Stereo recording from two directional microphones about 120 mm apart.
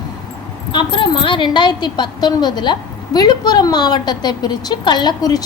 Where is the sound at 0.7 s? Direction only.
40° left (ahead or behind).